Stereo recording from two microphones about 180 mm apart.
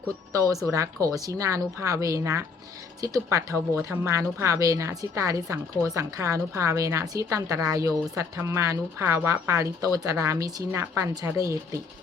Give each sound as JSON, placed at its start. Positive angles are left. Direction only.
{"t": 0.3, "sound": "a woman's voice", "side_deg": -20}